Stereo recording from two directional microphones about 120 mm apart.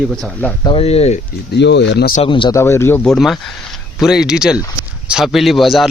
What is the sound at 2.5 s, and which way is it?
Speech, 20° left (ahead or behind).